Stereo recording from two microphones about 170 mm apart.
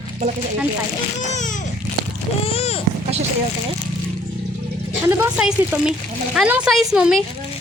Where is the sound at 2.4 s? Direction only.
35° left (ahead or behind).